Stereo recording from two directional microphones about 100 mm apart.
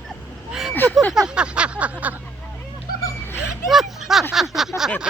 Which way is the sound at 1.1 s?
5° right (ahead or behind).